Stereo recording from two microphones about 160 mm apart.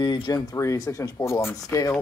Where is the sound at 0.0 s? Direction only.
25° left (ahead or behind).